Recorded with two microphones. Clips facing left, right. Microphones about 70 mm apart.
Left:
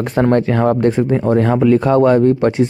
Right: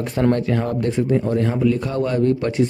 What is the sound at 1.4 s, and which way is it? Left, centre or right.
Speech, left.